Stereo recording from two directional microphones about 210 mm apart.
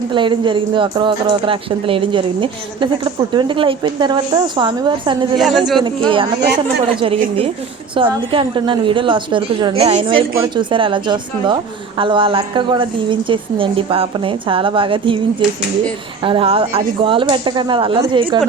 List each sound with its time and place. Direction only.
0.1 s a woman's voice: 25° right (ahead or behind)
5.4 s a man's voice: centre (ahead or behind)
5.8 s a woman's voice: 25° right (ahead or behind)
16.2 s a woman's voice: 25° right (ahead or behind)